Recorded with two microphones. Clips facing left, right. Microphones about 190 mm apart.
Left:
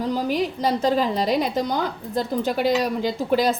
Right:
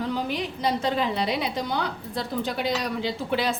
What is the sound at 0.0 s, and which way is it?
A woman's voice, 40° left (ahead or behind).